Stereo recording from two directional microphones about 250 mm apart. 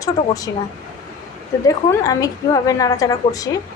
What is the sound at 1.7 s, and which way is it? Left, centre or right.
A woman's voice, centre.